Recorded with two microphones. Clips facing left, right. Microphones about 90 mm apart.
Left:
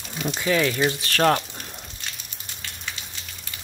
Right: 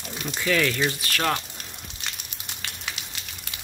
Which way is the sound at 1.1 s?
40° left (ahead or behind).